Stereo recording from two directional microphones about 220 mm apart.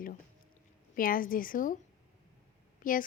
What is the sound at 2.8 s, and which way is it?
Speech, 40° left (ahead or behind).